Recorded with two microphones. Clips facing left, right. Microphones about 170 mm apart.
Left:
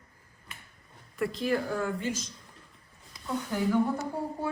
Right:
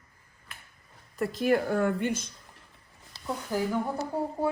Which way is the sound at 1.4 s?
55° right (ahead or behind).